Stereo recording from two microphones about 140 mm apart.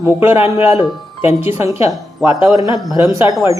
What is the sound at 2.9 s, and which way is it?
Speech, 20° right (ahead or behind).